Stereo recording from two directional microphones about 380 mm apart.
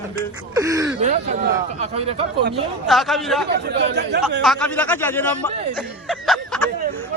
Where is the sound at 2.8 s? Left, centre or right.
Centre.